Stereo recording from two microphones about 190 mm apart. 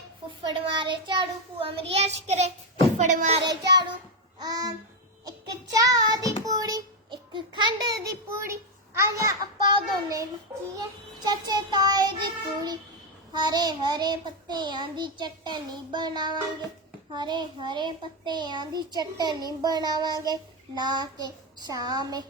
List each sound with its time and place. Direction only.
0.3 s a child's voice: 25° right (ahead or behind)
3.4 s a child's voice: 20° right (ahead or behind)
4.4 s music: 20° right (ahead or behind)
5.7 s a child's voice: 20° right (ahead or behind)
6.4 s child singing: 20° right (ahead or behind)
11.3 s a child's voice: 20° right (ahead or behind)